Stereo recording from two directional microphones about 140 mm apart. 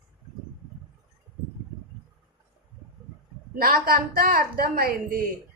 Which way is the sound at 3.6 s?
90° right.